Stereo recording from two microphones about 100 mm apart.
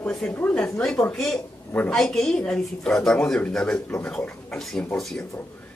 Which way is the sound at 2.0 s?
5° left (ahead or behind).